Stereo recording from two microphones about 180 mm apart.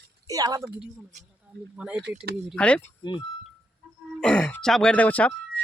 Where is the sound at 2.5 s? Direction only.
5° left (ahead or behind).